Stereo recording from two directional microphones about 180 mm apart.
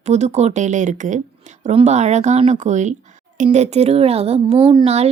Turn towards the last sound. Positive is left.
turn(degrees=-35)  # may be behind; listen again after turning